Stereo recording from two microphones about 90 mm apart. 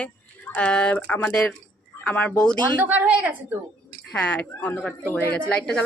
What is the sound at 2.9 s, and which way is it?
Speech, 20° right (ahead or behind).